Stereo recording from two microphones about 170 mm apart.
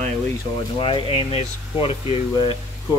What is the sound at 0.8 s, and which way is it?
Speech, 30° left (ahead or behind).